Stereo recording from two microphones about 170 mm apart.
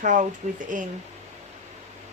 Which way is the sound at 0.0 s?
50° right (ahead or behind).